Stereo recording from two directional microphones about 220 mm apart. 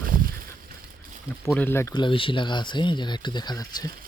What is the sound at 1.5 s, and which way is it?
Speech, 10° left (ahead or behind).